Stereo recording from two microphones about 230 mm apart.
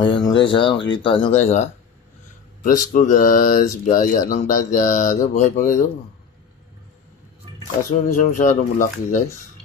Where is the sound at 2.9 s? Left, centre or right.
Left.